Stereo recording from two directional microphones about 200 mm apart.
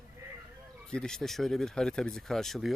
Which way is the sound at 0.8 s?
5° left (ahead or behind).